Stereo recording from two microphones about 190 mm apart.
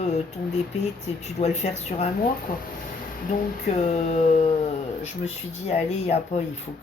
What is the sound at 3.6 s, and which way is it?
Speech, 35° left (ahead or behind).